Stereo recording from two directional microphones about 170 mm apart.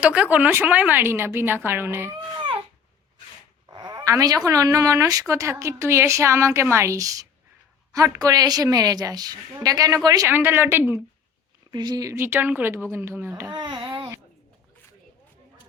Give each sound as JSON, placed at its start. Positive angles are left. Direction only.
{"t": 0.0, "sound": "a woman's voice", "side_deg": -5}
{"t": 3.7, "sound": "a woman's voice", "side_deg": -25}
{"t": 11.7, "sound": "a woman's voice", "side_deg": -25}
{"t": 13.5, "sound": "babbling", "side_deg": -25}